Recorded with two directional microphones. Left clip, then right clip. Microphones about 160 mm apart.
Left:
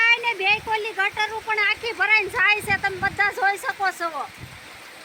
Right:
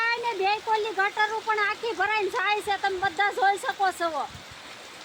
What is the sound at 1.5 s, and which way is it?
Speech, 35° right (ahead or behind).